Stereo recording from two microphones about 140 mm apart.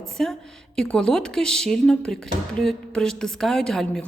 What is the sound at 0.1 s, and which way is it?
A woman's voice, 5° left (ahead or behind).